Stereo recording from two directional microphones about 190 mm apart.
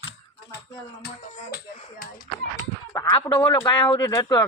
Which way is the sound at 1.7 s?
50° left (ahead or behind).